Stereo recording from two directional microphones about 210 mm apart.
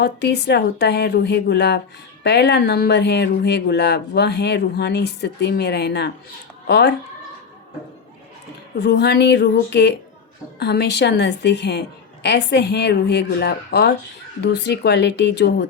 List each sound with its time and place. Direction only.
0.0 s speech: 50° left (ahead or behind)
8.8 s speech: 55° left (ahead or behind)